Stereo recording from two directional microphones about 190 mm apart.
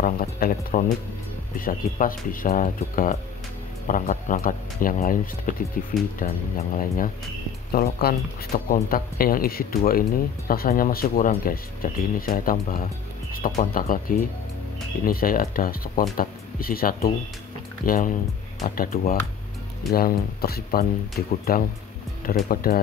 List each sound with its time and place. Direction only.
0.0 s speech: 50° left (ahead or behind)
7.7 s speech: 50° left (ahead or behind)